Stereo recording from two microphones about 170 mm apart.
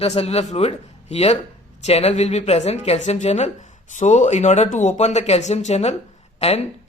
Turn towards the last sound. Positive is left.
turn(degrees=40)  # may be behind; listen again after turning